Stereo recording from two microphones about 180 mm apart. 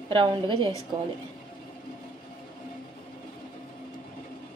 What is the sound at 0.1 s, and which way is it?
Speech, 30° right (ahead or behind).